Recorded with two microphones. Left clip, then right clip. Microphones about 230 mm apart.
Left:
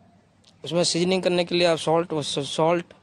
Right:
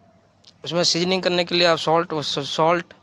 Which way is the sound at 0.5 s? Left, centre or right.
Centre.